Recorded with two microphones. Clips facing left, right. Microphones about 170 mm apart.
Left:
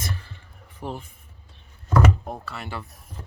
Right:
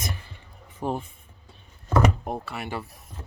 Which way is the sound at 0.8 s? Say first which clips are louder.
Right 5 dB; 45° right (ahead or behind).